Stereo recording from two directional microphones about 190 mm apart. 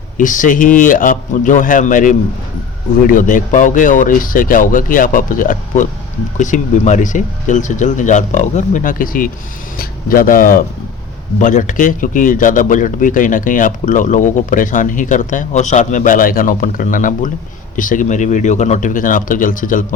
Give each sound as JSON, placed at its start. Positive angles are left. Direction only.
{"t": 0.2, "sound": "a man's voice", "side_deg": 45}